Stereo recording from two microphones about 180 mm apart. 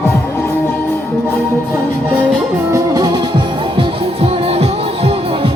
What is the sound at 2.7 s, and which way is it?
Music, 20° right (ahead or behind).